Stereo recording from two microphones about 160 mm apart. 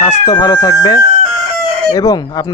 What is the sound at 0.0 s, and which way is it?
A man's voice, 20° left (ahead or behind).